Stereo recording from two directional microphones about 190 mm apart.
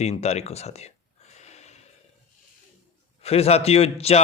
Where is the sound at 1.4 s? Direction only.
35° left (ahead or behind).